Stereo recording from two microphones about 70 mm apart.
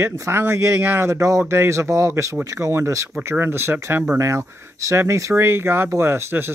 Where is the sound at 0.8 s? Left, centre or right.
Right.